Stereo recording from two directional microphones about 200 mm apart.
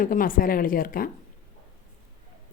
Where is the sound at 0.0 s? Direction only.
45° left (ahead or behind).